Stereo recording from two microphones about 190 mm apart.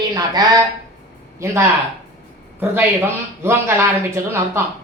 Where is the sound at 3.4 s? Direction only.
15° right (ahead or behind).